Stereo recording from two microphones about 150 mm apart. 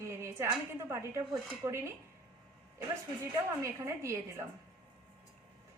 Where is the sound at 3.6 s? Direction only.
20° right (ahead or behind).